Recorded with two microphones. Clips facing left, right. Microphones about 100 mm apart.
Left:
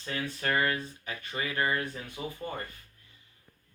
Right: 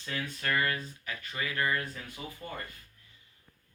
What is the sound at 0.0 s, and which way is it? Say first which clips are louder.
Speech: left 2 dB; 35° left (ahead or behind).